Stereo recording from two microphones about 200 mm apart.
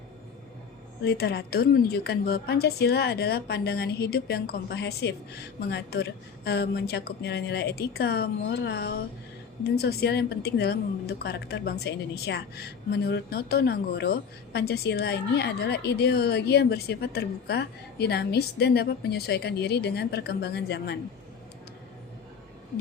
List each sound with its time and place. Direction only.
1.0 s a woman's voice: 50° left (ahead or behind)